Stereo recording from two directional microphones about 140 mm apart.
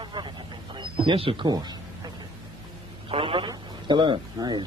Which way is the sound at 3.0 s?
40° right (ahead or behind).